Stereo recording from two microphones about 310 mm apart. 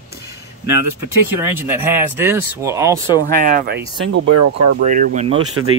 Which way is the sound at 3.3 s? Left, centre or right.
Right.